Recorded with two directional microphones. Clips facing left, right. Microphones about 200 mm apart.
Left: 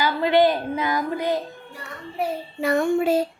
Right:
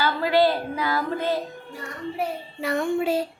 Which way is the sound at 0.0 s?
20° left (ahead or behind).